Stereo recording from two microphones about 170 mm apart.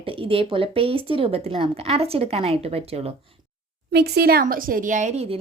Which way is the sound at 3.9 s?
70° right (ahead or behind).